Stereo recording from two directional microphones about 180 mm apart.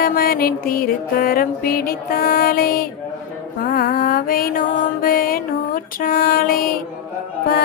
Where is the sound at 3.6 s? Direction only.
55° left (ahead or behind).